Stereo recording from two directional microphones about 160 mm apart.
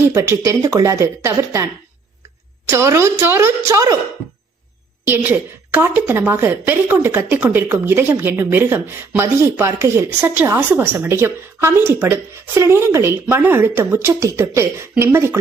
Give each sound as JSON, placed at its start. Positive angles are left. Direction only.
{"t": 0.0, "sound": "speech", "side_deg": -15}
{"t": 5.0, "sound": "speech", "side_deg": -10}